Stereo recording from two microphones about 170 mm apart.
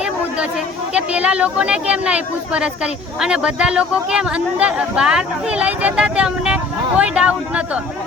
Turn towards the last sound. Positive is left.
turn(degrees=-5)  # may be behind; listen again after turning